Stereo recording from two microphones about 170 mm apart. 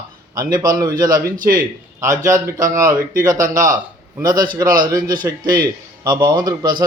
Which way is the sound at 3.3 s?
50° right (ahead or behind).